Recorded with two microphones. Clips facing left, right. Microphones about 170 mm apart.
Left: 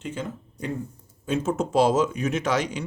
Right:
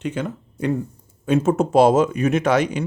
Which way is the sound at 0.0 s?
70° right (ahead or behind).